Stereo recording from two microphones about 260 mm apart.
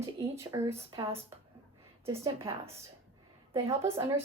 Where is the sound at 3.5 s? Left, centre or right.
Centre.